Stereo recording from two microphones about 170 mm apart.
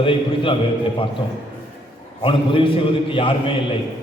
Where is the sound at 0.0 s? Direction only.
30° left (ahead or behind).